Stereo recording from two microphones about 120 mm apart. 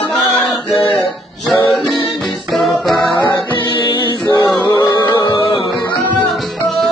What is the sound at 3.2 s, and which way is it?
Music, 40° left (ahead or behind).